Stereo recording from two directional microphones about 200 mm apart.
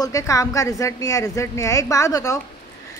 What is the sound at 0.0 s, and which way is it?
A woman's voice, 15° left (ahead or behind).